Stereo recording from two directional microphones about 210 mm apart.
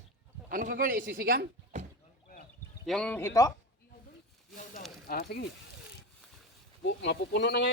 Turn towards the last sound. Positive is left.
turn(degrees=55)  # may be behind; listen again after turning